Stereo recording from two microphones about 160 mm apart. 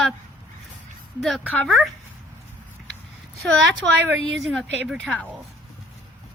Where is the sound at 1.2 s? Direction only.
Centre (ahead or behind).